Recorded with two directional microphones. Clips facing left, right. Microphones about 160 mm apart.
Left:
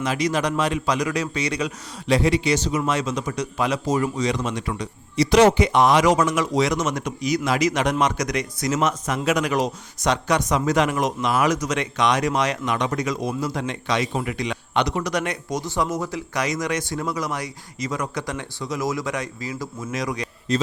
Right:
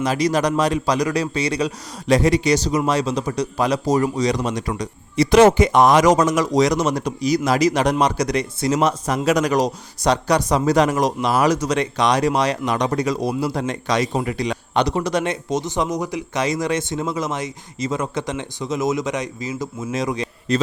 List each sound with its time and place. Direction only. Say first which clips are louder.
0.0 s a man's voice: right 4 dB; 35° right (ahead or behind)